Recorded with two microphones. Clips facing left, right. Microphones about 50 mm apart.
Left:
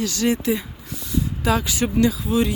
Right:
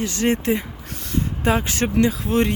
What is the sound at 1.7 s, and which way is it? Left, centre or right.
Speech, right.